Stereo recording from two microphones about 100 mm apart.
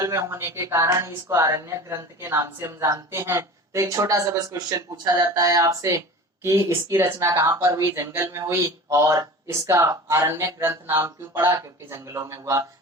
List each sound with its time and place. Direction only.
0.0 s a woman's voice: 30° right (ahead or behind)